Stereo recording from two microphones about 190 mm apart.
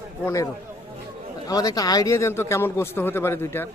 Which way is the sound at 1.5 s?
20° left (ahead or behind).